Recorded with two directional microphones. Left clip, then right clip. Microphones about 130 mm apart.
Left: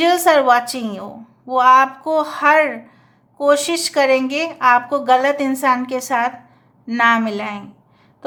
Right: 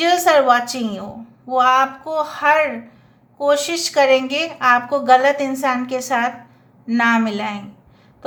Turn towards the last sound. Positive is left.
turn(degrees=30)  # may be behind; listen again after turning